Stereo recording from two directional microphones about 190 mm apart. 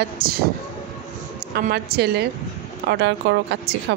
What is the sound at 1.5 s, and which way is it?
Speech, 60° right (ahead or behind).